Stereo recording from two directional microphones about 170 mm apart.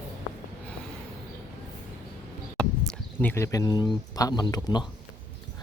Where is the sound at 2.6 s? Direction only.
5° left (ahead or behind); by 4.9 s 25° left (ahead or behind).